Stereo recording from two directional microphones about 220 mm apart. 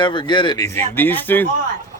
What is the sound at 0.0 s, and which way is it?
Speech, 20° left (ahead or behind).